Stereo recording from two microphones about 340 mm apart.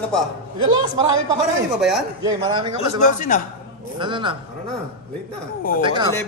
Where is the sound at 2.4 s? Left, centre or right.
Centre.